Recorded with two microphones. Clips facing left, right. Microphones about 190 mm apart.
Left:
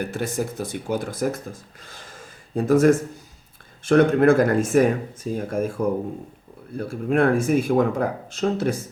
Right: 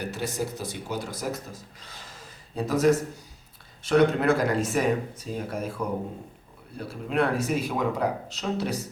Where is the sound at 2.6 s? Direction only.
50° left (ahead or behind).